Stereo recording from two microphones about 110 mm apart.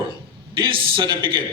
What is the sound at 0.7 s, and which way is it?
Speech, 50° right (ahead or behind).